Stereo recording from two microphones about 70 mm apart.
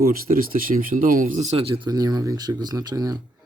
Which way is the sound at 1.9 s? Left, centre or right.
Right.